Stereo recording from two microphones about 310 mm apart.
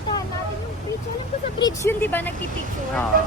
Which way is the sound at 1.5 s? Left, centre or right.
Centre.